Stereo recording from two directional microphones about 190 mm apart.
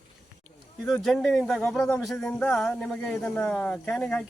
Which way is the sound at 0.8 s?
Centre (ahead or behind).